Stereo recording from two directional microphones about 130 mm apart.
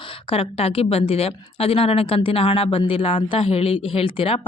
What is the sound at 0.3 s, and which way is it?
Speech, 50° left (ahead or behind).